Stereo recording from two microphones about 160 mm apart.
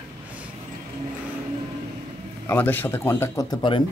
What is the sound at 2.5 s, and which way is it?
Speech, 10° left (ahead or behind).